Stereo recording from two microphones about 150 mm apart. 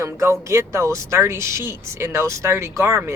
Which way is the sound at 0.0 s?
20° right (ahead or behind).